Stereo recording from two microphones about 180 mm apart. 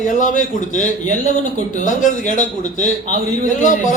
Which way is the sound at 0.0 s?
45° left (ahead or behind).